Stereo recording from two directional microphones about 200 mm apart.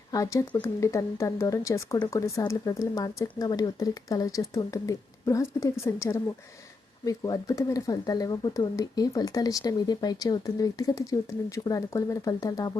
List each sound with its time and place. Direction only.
0.1 s speech: 15° left (ahead or behind)